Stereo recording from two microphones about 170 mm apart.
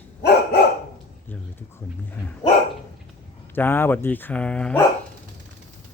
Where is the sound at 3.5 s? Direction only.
10° left (ahead or behind).